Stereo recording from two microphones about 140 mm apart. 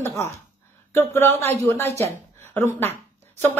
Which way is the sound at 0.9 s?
15° left (ahead or behind).